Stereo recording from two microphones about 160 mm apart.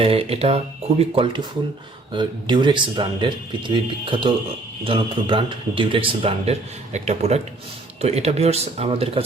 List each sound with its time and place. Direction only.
0.0 s a man's voice: 35° right (ahead or behind)